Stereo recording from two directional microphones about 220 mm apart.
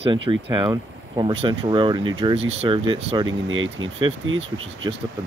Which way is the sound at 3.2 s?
65° right (ahead or behind).